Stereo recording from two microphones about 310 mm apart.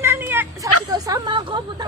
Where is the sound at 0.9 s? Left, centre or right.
Centre.